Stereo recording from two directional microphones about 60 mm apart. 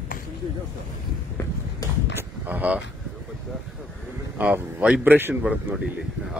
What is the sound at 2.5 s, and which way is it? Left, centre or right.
Speech, right.